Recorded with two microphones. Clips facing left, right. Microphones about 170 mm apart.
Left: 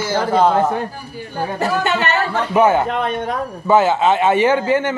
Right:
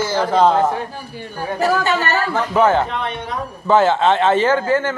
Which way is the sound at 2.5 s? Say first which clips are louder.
Left 2 dB; 10° left (ahead or behind).